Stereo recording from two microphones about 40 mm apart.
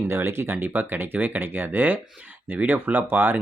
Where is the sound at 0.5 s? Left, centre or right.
Right.